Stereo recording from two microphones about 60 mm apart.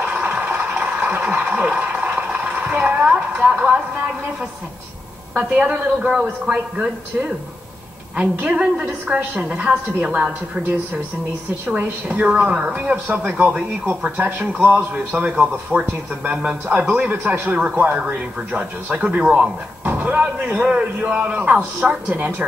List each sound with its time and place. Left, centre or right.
0.0 s a sound: right
5.3 s a woman's voice: right
11.7 s a woman's voice: right
19.8 s a woman's voice: right